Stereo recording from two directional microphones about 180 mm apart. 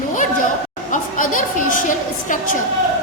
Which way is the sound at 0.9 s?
45° left (ahead or behind).